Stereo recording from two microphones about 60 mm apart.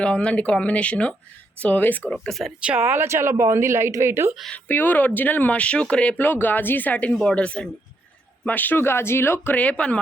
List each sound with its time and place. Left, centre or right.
0.0 s speech: left
2.2 s speech: centre
2.8 s speech: right
4.5 s speech: left
6.1 s speech: left
7.1 s speech: centre
7.3 s speech: centre
8.4 s speech: left
9.6 s speech: left